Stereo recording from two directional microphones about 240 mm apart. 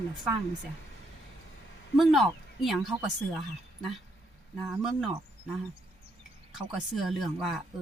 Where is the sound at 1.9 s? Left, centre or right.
Centre.